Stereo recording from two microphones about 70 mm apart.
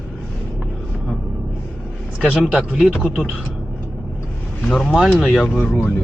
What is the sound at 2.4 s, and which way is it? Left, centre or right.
Speech, centre.